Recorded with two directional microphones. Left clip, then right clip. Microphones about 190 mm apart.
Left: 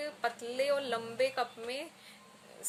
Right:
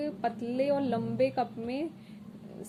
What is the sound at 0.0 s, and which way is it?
A woman's voice, 20° left (ahead or behind).